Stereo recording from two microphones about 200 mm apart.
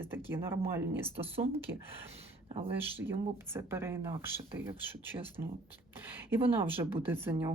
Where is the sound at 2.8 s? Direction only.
10° right (ahead or behind).